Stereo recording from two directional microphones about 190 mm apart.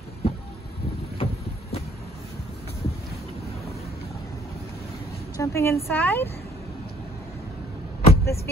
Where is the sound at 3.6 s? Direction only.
35° left (ahead or behind).